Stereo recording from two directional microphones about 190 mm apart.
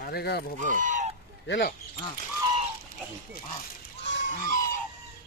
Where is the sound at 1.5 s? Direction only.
55° left (ahead or behind).